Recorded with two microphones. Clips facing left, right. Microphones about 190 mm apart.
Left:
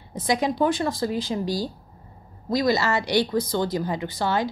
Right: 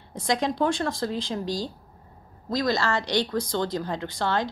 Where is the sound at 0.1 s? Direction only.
5° left (ahead or behind).